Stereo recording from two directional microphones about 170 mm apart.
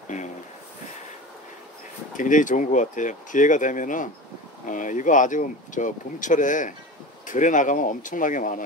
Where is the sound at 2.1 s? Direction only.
50° left (ahead or behind).